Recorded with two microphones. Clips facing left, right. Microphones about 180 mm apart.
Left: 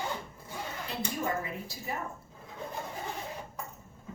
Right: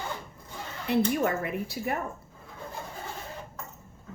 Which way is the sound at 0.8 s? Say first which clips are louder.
Right 10 dB; 65° right (ahead or behind).